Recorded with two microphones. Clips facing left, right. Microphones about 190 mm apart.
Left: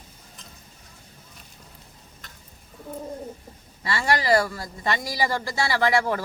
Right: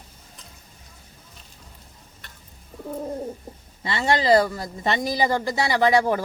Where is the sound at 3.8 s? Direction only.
25° right (ahead or behind).